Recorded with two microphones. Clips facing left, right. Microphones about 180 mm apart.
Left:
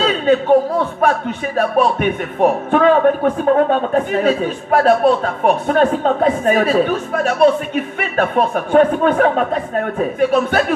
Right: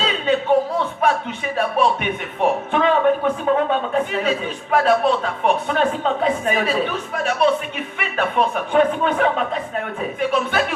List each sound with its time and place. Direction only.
0.0 s a man's voice: 45° left (ahead or behind)